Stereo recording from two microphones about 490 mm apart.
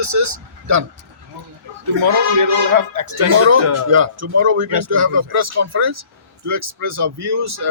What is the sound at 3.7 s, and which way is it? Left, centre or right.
Speech, right.